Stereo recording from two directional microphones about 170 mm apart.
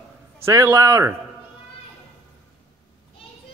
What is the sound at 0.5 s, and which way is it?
Speech, 15° right (ahead or behind).